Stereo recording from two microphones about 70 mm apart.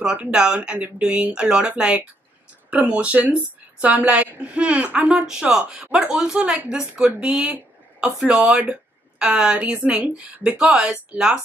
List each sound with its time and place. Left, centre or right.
0.0 s speech: centre
5.2 s speech: centre